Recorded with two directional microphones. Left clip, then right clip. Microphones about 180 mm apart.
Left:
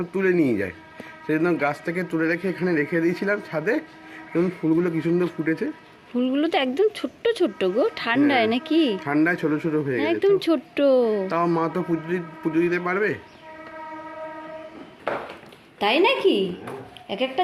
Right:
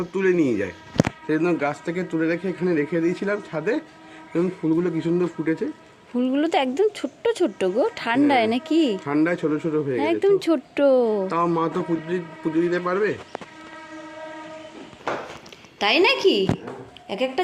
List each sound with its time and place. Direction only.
0.1 s speech: 20° left (ahead or behind)
6.1 s speech: centre (ahead or behind)
9.0 s speech: 20° left (ahead or behind)
10.0 s speech: 5° right (ahead or behind)
11.3 s speech: 15° left (ahead or behind)
15.8 s speech: centre (ahead or behind)